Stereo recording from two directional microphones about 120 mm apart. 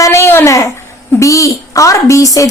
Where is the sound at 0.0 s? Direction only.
25° left (ahead or behind).